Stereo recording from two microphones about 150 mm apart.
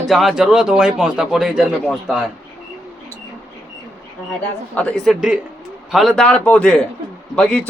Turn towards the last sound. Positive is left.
turn(degrees=5)  # may be behind; listen again after turning